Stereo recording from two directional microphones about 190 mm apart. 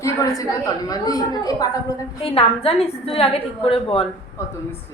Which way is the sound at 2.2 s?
30° left (ahead or behind).